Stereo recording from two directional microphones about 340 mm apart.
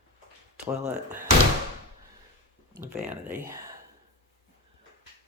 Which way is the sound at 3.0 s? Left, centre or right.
Centre.